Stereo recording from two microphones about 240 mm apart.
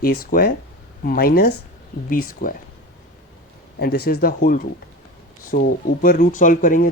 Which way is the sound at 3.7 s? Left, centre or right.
Left.